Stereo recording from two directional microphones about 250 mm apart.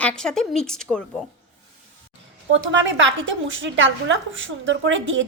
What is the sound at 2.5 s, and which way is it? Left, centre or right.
A woman's voice, right.